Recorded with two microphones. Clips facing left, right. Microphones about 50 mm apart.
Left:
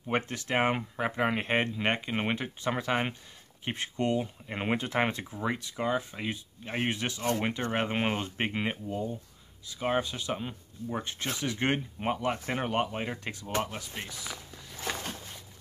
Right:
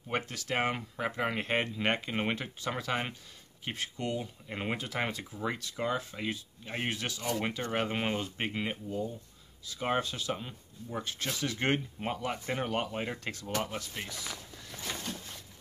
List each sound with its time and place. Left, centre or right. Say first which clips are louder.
0.1 s speech: left 4 dB; left
4.2 s speech: left 4 dB; centre
4.7 s speech: left 9 dB; left
5.4 s speech: left 2 dB; centre
9.8 s speech: left 2 dB; centre
10.0 s speech: left 2 dB; centre